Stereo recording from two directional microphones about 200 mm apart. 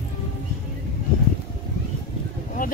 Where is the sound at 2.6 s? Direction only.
45° left (ahead or behind).